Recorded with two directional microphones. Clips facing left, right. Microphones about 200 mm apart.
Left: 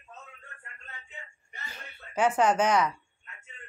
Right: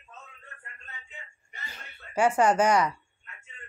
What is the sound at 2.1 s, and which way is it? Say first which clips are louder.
Speech: right 2 dB; 10° right (ahead or behind).